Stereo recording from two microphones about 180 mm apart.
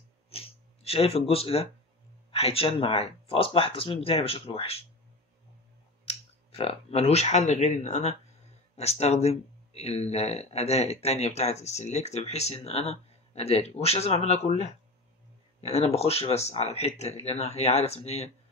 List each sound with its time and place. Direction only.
0.3 s a sound: 35° left (ahead or behind)
2.3 s speech: 35° left (ahead or behind)
6.0 s speech: 30° left (ahead or behind)